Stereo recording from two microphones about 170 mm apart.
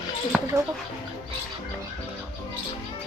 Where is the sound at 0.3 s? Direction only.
5° right (ahead or behind).